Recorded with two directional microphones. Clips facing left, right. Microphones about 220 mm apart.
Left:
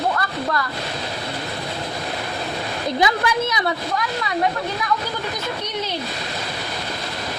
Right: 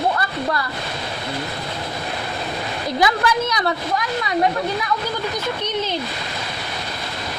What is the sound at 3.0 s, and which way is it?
Speech, 25° left (ahead or behind).